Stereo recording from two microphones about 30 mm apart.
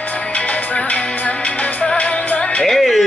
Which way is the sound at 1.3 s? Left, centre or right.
Left.